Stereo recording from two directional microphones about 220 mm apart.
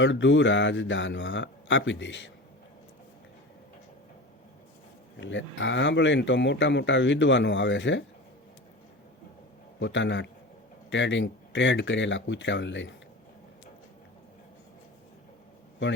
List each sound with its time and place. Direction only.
0.0 s speech: 55° left (ahead or behind)
5.2 s speech: 60° left (ahead or behind)
9.8 s speech: 55° left (ahead or behind)